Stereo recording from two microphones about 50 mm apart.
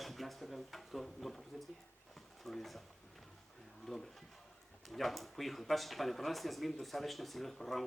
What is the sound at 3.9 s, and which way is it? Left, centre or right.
Speech, centre.